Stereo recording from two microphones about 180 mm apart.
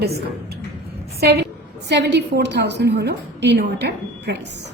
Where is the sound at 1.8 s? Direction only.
70° right (ahead or behind).